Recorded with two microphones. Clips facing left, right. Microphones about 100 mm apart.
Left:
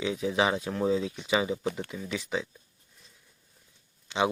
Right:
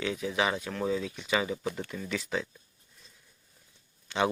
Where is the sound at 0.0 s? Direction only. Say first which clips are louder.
Left 3 dB; 20° left (ahead or behind).